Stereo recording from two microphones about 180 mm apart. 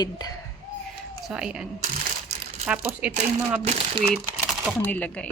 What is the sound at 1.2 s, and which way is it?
Speech, 5° right (ahead or behind).